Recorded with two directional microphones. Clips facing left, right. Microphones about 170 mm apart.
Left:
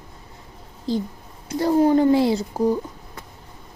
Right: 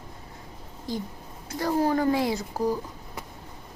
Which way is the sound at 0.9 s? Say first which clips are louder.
Left 8 dB; 30° left (ahead or behind).